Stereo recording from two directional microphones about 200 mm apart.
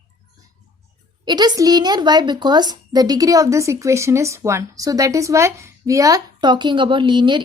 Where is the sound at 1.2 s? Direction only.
20° right (ahead or behind).